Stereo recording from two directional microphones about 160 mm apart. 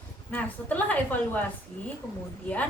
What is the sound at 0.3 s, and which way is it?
A woman's voice, 10° left (ahead or behind).